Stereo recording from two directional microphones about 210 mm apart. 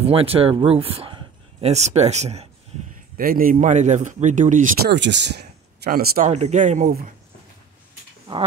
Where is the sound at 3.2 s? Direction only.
40° right (ahead or behind).